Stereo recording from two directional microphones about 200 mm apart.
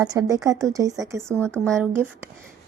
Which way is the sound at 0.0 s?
15° right (ahead or behind).